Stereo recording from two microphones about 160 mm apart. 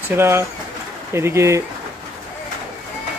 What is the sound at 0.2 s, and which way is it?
Speech, 15° right (ahead or behind).